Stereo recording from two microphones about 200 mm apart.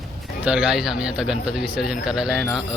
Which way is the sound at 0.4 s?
5° right (ahead or behind).